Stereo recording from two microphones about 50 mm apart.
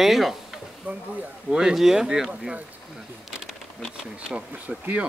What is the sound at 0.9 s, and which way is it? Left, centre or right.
Speech, right.